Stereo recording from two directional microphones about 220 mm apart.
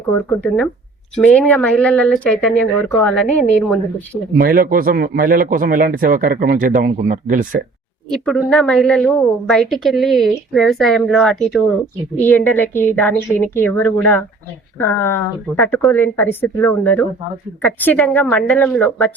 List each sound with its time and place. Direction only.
0.3 s a woman's voice: 5° left (ahead or behind)
4.4 s speech: 40° right (ahead or behind)
8.1 s a woman's voice: centre (ahead or behind)